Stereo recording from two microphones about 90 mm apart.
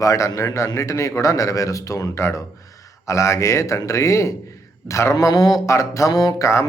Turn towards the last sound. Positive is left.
turn(degrees=45)  # may be behind; listen again after turning